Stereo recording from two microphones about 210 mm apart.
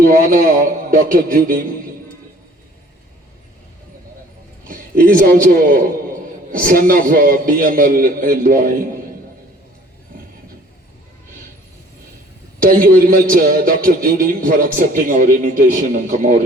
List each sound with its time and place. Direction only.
0.0 s a man's voice: 40° right (ahead or behind)
4.7 s a man's voice: 40° right (ahead or behind)
12.5 s a man's voice: 40° right (ahead or behind)